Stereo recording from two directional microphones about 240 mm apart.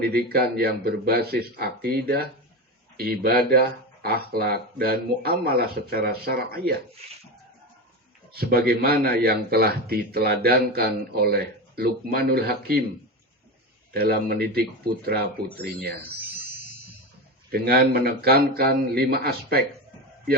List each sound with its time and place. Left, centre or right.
0.0 s a man's voice: right
8.3 s a man's voice: right
13.9 s a man's voice: right
16.2 s music: centre
17.5 s a man's voice: right